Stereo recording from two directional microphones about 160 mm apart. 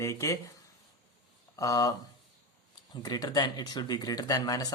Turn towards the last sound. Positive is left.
turn(degrees=25)  # may be behind; listen again after turning